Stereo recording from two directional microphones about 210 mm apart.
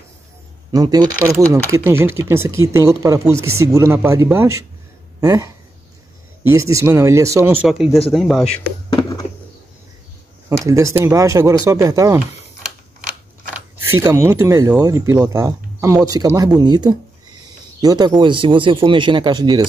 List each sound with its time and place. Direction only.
0.7 s speech: 20° right (ahead or behind)
7.6 s speech: centre (ahead or behind)
8.5 s a sound: 20° left (ahead or behind)
10.6 s speech: 15° right (ahead or behind)
13.8 s speech: 10° right (ahead or behind)